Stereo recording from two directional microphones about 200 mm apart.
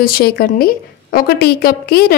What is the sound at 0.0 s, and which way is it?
Speech, 50° left (ahead or behind).